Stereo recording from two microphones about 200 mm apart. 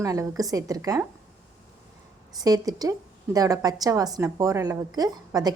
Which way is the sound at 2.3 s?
20° right (ahead or behind).